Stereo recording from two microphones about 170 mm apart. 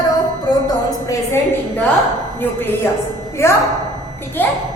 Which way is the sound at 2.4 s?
10° left (ahead or behind).